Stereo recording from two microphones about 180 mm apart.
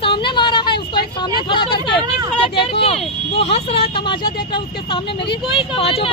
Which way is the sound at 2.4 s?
30° left (ahead or behind).